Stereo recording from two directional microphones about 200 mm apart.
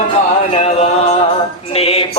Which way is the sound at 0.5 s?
35° left (ahead or behind).